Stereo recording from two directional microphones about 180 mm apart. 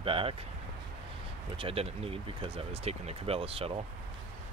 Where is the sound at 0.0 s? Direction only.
30° right (ahead or behind).